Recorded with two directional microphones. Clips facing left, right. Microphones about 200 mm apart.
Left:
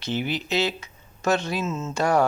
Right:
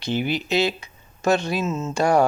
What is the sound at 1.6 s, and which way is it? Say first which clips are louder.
Speech: right 3 dB; 30° right (ahead or behind).